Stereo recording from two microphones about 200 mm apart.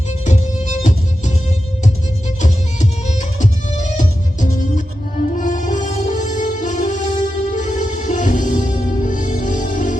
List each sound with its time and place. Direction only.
0.3 s music: 35° left (ahead or behind)
2.4 s music: 35° left (ahead or behind)